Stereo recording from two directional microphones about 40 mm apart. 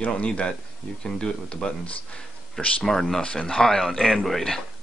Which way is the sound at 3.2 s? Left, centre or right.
Left.